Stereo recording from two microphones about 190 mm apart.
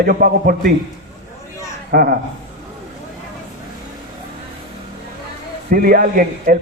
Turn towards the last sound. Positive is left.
turn(degrees=-50)  # may be behind; listen again after turning